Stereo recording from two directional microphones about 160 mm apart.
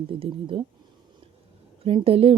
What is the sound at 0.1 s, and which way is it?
Speech, 35° right (ahead or behind).